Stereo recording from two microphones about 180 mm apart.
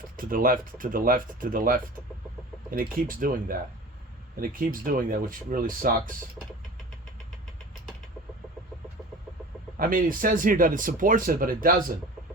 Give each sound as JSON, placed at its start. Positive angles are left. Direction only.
{"t": 0.2, "sound": "speech", "side_deg": -50}
{"t": 9.7, "sound": "speech", "side_deg": -50}